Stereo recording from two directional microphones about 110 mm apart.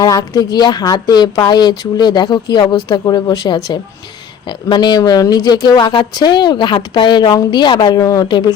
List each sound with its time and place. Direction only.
0.0 s speech: 40° left (ahead or behind)